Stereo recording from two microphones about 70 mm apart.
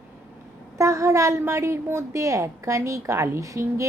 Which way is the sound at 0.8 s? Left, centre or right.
Right.